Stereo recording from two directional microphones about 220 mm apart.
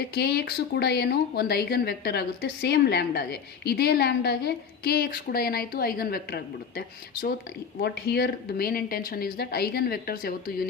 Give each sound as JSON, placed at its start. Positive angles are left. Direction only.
{"t": 0.0, "sound": "speech", "side_deg": 45}